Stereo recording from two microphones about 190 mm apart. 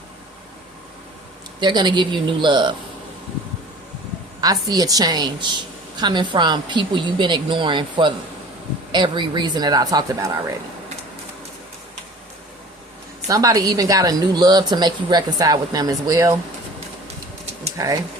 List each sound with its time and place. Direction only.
1.6 s speech: 25° right (ahead or behind)
4.4 s speech: 20° right (ahead or behind)
13.2 s speech: 20° right (ahead or behind)
17.7 s speech: 20° right (ahead or behind)